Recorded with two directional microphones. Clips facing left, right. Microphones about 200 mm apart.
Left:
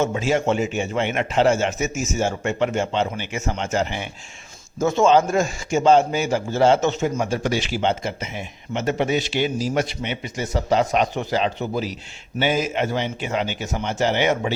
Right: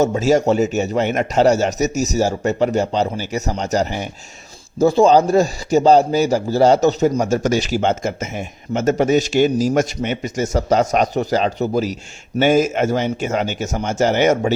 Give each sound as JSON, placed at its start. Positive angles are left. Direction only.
{"t": 0.0, "sound": "a man's voice", "side_deg": -40}